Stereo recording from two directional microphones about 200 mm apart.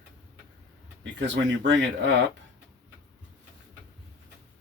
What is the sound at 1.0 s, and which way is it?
Speech, 65° right (ahead or behind).